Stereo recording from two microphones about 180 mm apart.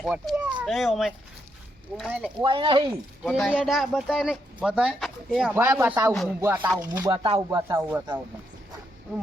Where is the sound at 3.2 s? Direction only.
Centre (ahead or behind); by 8.1 s 20° right (ahead or behind).